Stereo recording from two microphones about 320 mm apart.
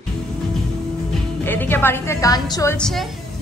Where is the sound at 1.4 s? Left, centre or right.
Centre.